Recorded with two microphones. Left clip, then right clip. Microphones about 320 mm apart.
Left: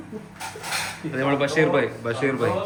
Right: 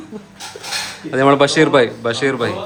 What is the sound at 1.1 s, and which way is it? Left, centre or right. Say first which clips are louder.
A man's voice: right 10 dB; centre.